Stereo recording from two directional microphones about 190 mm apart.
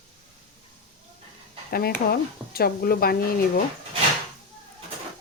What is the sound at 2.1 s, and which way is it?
Speech, 55° left (ahead or behind).